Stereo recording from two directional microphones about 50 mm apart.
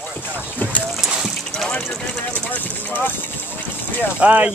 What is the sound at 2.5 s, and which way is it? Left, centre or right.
Speech, left.